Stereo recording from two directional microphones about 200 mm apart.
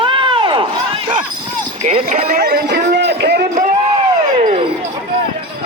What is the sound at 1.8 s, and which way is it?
Speech, 35° right (ahead or behind).